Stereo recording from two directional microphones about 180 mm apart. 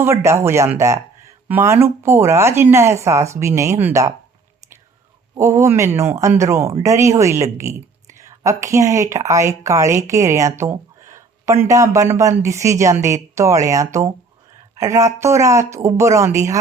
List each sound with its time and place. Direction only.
0.0 s speech: 15° right (ahead or behind)
5.4 s speech: 15° right (ahead or behind)